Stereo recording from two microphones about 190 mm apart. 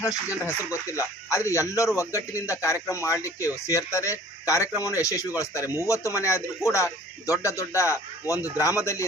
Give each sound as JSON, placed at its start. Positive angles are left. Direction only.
{"t": 0.4, "sound": "speech", "side_deg": 15}